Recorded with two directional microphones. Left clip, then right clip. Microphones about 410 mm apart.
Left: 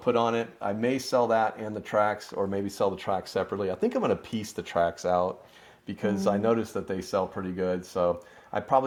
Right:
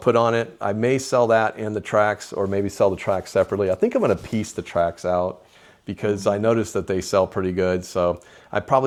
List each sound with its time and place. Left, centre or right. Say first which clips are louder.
0.0 s speech: right 7 dB; right